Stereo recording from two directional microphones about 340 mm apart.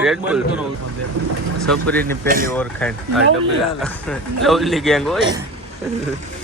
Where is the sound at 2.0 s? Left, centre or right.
Right.